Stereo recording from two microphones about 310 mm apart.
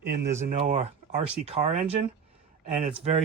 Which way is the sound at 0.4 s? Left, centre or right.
Right.